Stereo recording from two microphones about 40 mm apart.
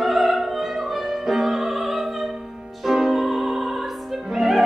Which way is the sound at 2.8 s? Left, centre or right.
Centre.